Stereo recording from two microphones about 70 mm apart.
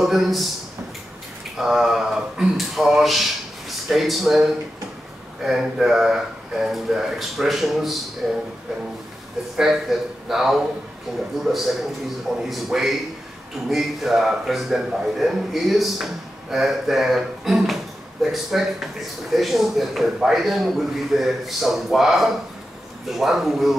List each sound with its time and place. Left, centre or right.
0.0 s a man's voice: centre
1.6 s a man's voice: centre
9.6 s a man's voice: centre